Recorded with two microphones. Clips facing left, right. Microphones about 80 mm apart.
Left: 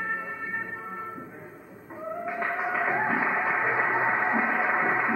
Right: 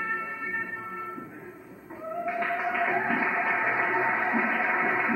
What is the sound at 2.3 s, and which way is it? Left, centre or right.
Music, left.